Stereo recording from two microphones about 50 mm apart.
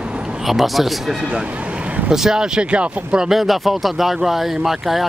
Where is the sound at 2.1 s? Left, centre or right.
Centre.